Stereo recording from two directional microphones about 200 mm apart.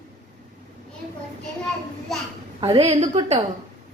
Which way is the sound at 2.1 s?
Centre (ahead or behind).